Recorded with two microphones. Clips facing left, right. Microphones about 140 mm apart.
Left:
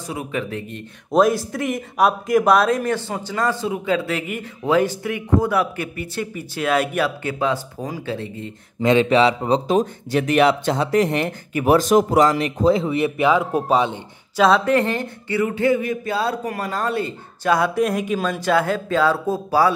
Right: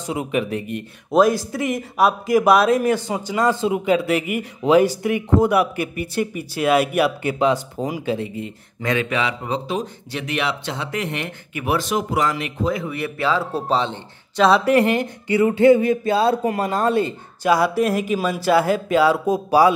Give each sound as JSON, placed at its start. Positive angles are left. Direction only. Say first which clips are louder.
{"t": 0.0, "sound": "speech", "louder": "right 4 dB", "side_deg": -20}
{"t": 1.2, "sound": "speech", "louder": "even", "side_deg": 0}
{"t": 8.8, "sound": "speech", "louder": "left 7 dB", "side_deg": 30}
{"t": 14.4, "sound": "speech", "louder": "right 1 dB", "side_deg": -5}
{"t": 15.4, "sound": "speech", "louder": "right 6 dB", "side_deg": -25}
{"t": 17.4, "sound": "speech", "louder": "right 1 dB", "side_deg": -5}